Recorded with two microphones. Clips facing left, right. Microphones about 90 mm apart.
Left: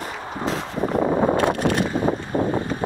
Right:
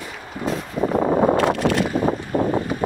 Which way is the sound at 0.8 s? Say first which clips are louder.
Right 2 dB; 20° right (ahead or behind).